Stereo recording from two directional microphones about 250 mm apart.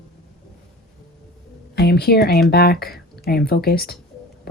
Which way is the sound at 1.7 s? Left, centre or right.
Left.